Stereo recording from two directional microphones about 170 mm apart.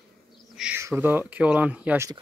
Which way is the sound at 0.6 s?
10° right (ahead or behind).